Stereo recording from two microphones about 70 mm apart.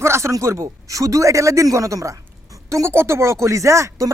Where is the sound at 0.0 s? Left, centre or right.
Right.